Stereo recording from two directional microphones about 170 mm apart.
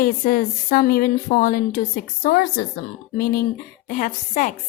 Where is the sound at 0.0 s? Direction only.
60° left (ahead or behind).